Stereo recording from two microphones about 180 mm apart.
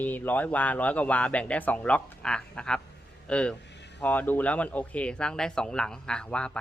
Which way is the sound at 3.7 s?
75° left (ahead or behind).